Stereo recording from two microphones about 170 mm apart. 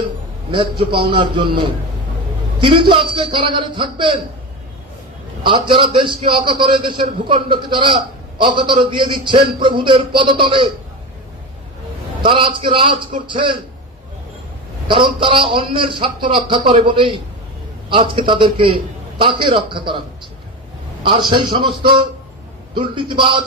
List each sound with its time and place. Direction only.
0.5 s a man's voice: 30° right (ahead or behind)
5.4 s a man's voice: 30° right (ahead or behind)
12.2 s a man's voice: 30° right (ahead or behind)
14.8 s a man's voice: 30° right (ahead or behind)
21.2 s a man's voice: 30° right (ahead or behind)
22.8 s a man's voice: 30° right (ahead or behind)